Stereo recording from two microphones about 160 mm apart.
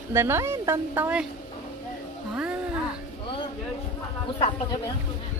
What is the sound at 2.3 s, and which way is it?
Music, 5° right (ahead or behind).